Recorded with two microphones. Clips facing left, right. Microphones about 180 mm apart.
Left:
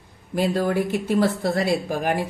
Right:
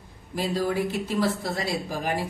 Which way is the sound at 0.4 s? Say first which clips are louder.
Left 4 dB; 55° left (ahead or behind).